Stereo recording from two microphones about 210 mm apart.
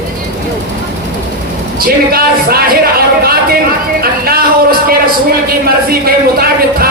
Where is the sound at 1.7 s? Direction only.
45° right (ahead or behind).